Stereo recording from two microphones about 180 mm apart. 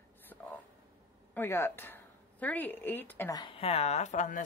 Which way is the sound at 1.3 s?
10° left (ahead or behind).